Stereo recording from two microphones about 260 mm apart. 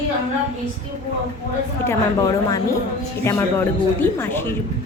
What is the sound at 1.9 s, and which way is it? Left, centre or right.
Speech, centre.